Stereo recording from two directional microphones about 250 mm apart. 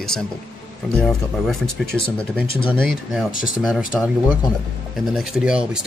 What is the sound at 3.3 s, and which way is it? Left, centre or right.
Speech, left.